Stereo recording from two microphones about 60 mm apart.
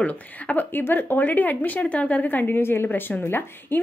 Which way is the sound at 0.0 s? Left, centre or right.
Left.